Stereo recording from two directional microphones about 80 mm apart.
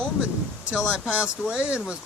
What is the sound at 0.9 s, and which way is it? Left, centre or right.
Speech, centre.